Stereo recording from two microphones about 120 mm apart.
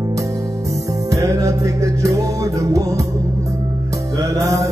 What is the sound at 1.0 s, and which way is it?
Music, 30° right (ahead or behind).